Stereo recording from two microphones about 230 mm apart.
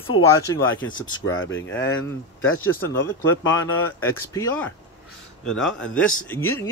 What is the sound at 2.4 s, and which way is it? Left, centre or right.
Speech, left.